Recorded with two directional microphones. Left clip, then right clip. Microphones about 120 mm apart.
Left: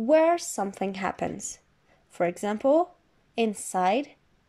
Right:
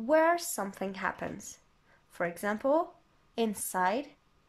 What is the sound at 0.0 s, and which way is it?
A woman's voice, 20° left (ahead or behind).